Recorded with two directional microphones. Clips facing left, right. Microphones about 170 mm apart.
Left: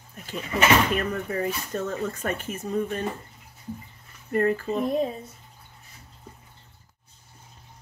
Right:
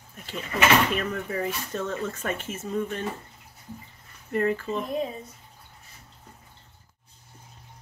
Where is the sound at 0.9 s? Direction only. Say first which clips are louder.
Left 2 dB; 40° left (ahead or behind).